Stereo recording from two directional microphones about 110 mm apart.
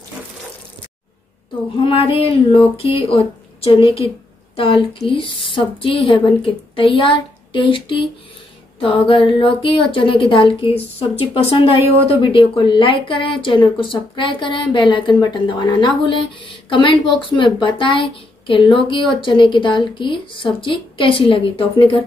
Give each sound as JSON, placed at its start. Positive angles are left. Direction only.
{"t": 1.8, "sound": "a woman's voice", "side_deg": 55}